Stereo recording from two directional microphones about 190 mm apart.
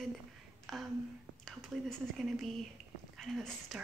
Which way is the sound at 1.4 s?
Centre (ahead or behind).